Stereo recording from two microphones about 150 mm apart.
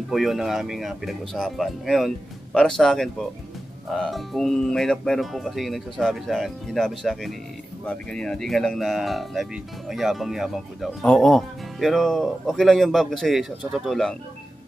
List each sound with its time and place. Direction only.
0.1 s speech: centre (ahead or behind)